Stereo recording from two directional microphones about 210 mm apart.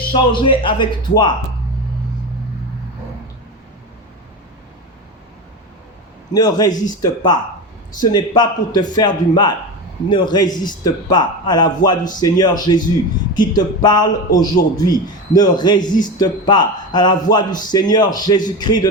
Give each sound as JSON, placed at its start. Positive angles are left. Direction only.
{"t": 0.1, "sound": "a man's voice", "side_deg": 25}
{"t": 6.3, "sound": "a man's voice", "side_deg": 20}